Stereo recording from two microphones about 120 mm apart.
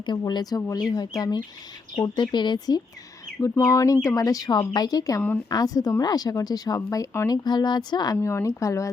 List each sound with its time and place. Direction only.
0.0 s speech: 35° left (ahead or behind)
7.4 s speech: 35° left (ahead or behind)